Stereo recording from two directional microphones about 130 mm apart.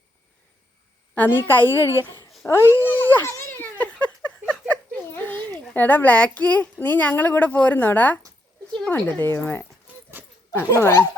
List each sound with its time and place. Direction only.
1.1 s speech: 15° left (ahead or behind)
2.5 s a sound: 20° left (ahead or behind)
4.7 s a child's voice: 15° left (ahead or behind)
9.9 s clip-clop: 10° right (ahead or behind)
10.5 s speech: 15° left (ahead or behind)